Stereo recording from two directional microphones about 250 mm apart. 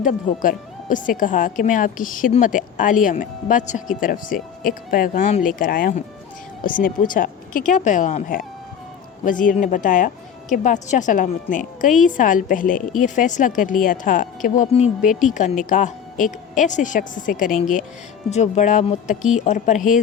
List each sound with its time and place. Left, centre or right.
0.0 s speech: left
15.0 s speech: centre
15.3 s speech: left